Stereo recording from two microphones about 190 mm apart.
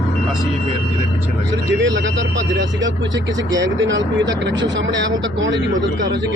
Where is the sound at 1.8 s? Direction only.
75° right (ahead or behind).